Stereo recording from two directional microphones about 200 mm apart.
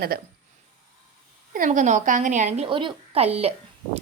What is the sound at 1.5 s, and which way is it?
A woman's voice, 40° right (ahead or behind).